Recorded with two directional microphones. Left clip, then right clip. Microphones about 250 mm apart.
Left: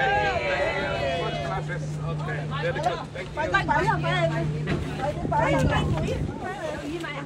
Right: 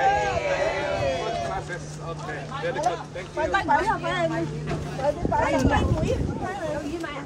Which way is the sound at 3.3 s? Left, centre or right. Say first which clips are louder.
Right 1 dB; right.